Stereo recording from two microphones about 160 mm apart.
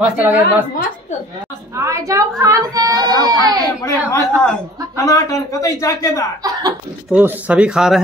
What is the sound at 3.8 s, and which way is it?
A man's voice, 20° left (ahead or behind).